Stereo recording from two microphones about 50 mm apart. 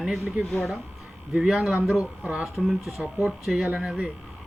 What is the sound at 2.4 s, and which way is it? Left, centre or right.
Speech, centre.